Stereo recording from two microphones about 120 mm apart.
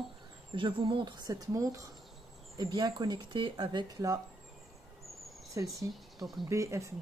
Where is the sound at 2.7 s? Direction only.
40° right (ahead or behind).